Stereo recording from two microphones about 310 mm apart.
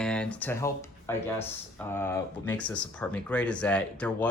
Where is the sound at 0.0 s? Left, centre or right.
Centre.